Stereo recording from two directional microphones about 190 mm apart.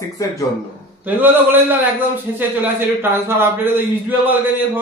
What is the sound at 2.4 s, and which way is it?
A man's voice, 10° right (ahead or behind).